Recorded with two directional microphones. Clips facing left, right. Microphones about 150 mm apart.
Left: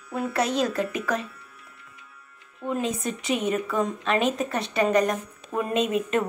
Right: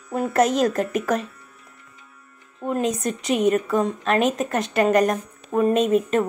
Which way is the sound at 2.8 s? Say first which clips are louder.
Right 4 dB; 40° right (ahead or behind).